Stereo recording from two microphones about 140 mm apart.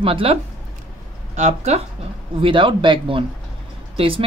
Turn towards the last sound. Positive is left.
turn(degrees=-40)  # may be behind; listen again after turning